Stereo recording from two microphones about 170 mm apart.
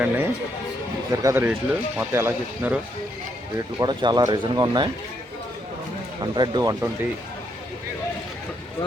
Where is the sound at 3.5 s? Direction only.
25° right (ahead or behind).